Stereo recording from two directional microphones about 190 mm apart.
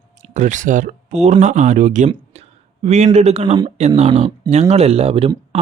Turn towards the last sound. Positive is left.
turn(degrees=-30)  # may be behind; listen again after turning